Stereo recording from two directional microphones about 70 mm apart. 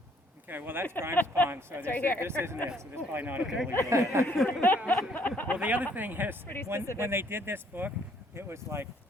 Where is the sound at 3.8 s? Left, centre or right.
Right.